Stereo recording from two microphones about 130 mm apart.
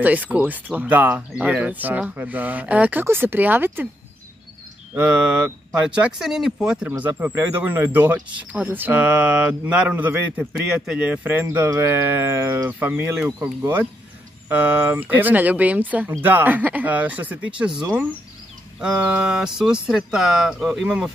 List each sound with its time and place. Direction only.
0.0 s speech: 10° right (ahead or behind)
4.9 s speech: 10° right (ahead or behind)